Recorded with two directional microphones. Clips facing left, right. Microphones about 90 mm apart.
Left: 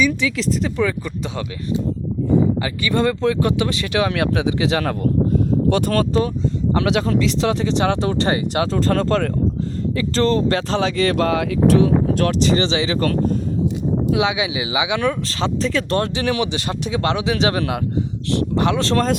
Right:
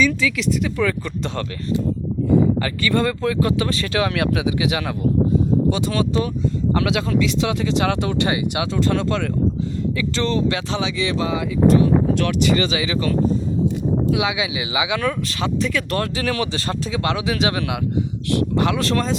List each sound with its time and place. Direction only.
0.0 s speech: 15° left (ahead or behind)
0.3 s speech: 35° left (ahead or behind)
0.8 s speech: 20° left (ahead or behind)
5.6 s speech: 55° left (ahead or behind); by 6.3 s 40° left (ahead or behind)
6.7 s speech: 25° left (ahead or behind); by 11.9 s 85° left
12.1 s speech: 40° left (ahead or behind)
14.1 s speech: 25° left (ahead or behind)